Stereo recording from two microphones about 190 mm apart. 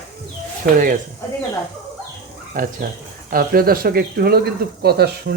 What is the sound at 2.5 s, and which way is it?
Speech, 45° right (ahead or behind).